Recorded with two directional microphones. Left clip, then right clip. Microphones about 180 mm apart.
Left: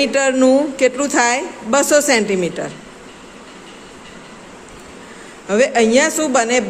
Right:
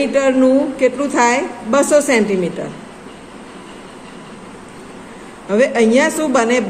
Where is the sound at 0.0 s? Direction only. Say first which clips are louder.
Right 1 dB; 30° left (ahead or behind).